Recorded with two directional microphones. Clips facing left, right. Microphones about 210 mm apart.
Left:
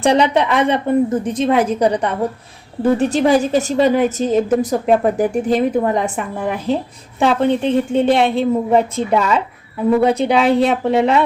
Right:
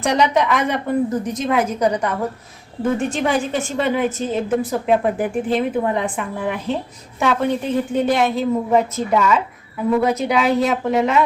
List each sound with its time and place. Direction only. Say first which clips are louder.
0.0 s a woman's voice: left 3 dB; 30° left (ahead or behind)
7.2 s a woman's voice: left 4 dB; 30° left (ahead or behind)